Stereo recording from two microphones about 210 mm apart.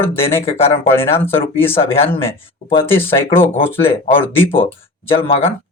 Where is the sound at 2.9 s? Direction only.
10° left (ahead or behind).